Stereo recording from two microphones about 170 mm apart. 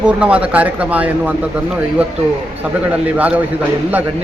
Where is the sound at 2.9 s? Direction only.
10° right (ahead or behind).